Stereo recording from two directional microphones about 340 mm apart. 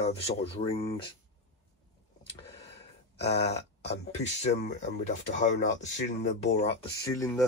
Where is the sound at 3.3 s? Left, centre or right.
Centre.